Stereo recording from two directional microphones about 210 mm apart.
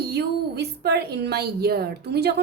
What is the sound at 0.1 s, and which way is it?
A woman's voice, 50° right (ahead or behind).